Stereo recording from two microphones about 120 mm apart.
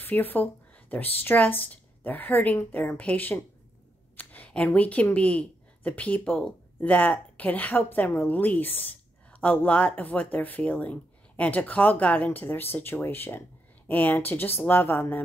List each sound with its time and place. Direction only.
0.0 s speech: 15° left (ahead or behind)